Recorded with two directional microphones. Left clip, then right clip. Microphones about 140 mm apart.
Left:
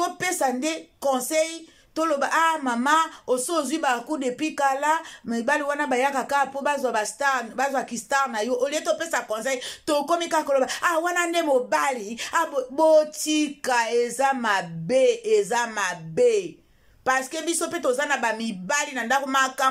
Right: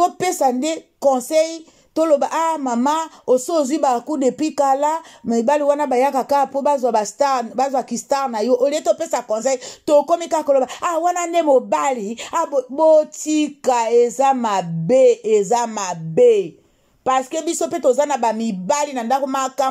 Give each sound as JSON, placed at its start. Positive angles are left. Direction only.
{"t": 0.0, "sound": "speech", "side_deg": -35}